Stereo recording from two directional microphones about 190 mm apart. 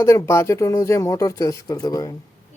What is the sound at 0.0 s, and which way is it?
Speech, 15° left (ahead or behind).